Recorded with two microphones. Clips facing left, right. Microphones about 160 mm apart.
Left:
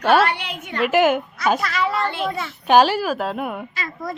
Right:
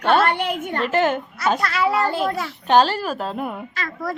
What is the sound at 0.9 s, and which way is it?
Speech, 10° left (ahead or behind).